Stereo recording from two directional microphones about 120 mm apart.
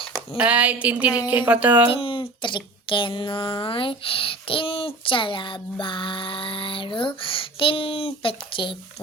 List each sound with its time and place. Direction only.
0.3 s a woman's voice: 10° right (ahead or behind)
1.9 s speech: 45° left (ahead or behind)